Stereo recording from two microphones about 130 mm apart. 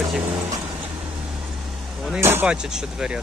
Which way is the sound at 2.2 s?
15° right (ahead or behind).